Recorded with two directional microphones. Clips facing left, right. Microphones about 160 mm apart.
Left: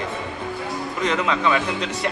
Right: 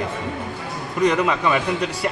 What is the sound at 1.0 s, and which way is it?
Speech, 10° right (ahead or behind).